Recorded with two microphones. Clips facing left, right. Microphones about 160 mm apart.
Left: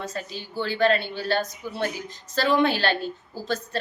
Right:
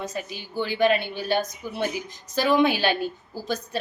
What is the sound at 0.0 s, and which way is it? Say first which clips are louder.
A woman's voice: right 1 dB; 15° right (ahead or behind).